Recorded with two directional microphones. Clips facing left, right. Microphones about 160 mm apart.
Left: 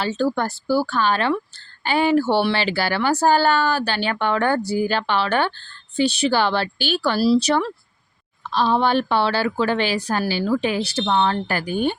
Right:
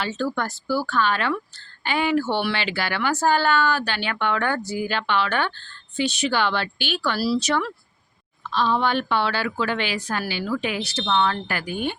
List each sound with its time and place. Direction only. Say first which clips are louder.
0.0 s a woman's voice: left 4 dB; 30° left (ahead or behind)